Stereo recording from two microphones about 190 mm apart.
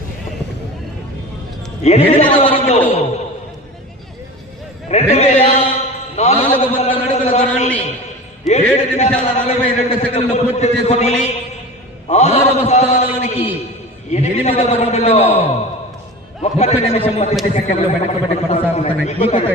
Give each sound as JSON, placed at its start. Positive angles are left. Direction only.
{"t": 1.8, "sound": "a man's voice", "side_deg": 35}
{"t": 4.9, "sound": "a man's voice", "side_deg": 35}
{"t": 6.1, "sound": "a sound", "side_deg": 35}
{"t": 8.4, "sound": "a man's voice", "side_deg": 35}